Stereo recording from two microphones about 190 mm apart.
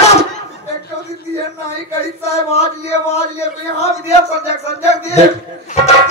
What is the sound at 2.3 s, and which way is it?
A man's voice, 35° left (ahead or behind).